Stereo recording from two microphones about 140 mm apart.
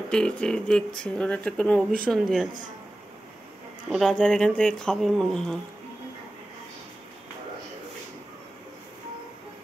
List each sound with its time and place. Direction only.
0.1 s speech: 5° left (ahead or behind)
3.9 s speech: centre (ahead or behind)